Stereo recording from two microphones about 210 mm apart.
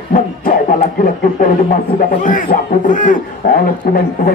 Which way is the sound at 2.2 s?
40° left (ahead or behind).